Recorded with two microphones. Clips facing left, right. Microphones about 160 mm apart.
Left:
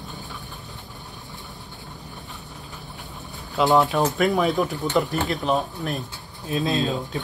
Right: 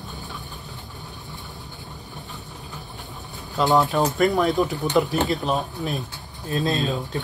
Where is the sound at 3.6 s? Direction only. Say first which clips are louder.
Left 1 dB; centre (ahead or behind).